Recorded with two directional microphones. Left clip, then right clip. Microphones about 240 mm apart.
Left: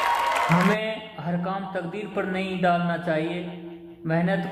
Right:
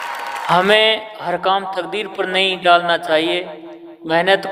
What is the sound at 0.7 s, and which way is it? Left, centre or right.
Speech, right.